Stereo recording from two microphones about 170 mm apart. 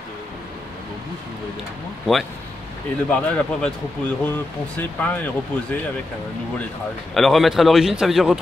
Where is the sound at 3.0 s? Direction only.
5° left (ahead or behind).